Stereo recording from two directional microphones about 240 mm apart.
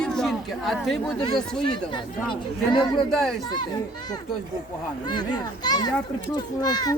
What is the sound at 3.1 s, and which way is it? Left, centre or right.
Speech, centre.